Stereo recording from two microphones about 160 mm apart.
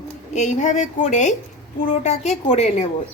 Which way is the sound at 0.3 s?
50° left (ahead or behind).